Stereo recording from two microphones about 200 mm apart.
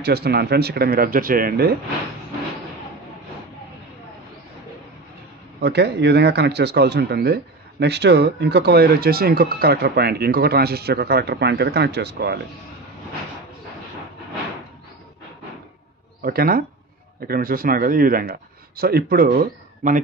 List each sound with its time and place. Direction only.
0.0 s speech: 55° right (ahead or behind)
5.6 s speech: 55° right (ahead or behind)
16.2 s speech: 50° right (ahead or behind)